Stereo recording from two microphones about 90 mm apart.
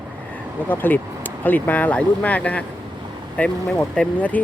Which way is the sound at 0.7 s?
20° left (ahead or behind).